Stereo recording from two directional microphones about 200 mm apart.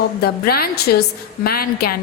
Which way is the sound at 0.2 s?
50° left (ahead or behind).